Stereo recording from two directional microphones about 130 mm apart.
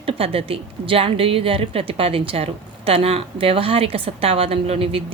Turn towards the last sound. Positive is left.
turn(degrees=-45)  # may be behind; listen again after turning